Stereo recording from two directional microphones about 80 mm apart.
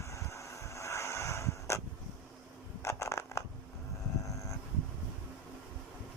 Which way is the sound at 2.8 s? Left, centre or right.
Left.